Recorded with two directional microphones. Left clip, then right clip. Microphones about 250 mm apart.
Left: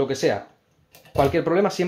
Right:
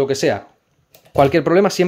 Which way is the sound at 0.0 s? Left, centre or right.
Right.